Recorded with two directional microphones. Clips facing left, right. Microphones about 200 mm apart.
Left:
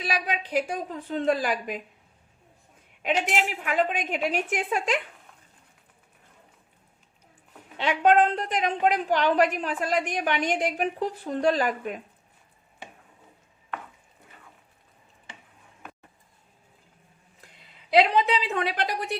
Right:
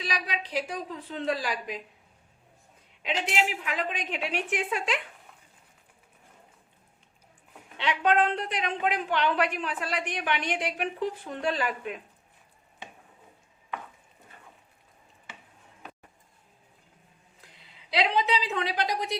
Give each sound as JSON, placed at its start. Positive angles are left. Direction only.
{"t": 0.0, "sound": "a woman's voice", "side_deg": 50}
{"t": 3.0, "sound": "a woman's voice", "side_deg": 45}
{"t": 7.8, "sound": "a woman's voice", "side_deg": 45}
{"t": 17.9, "sound": "a sound", "side_deg": 50}